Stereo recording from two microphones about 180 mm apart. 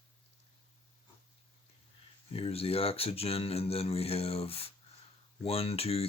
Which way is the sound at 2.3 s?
35° left (ahead or behind).